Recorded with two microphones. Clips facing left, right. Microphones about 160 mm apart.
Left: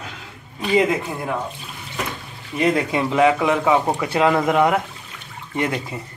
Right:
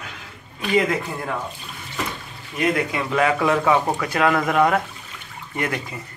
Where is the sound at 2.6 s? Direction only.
25° left (ahead or behind).